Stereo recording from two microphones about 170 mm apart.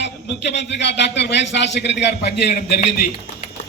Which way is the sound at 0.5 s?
90° left.